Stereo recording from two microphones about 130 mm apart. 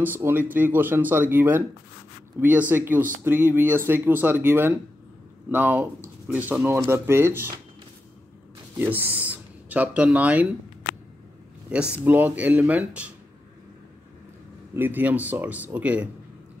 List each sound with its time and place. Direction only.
0.0 s speech: 15° right (ahead or behind)
8.7 s speech: 15° right (ahead or behind)
11.7 s speech: 10° right (ahead or behind)
14.8 s speech: 15° right (ahead or behind)